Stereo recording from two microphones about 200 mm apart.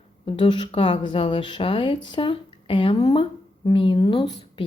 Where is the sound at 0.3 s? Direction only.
25° left (ahead or behind).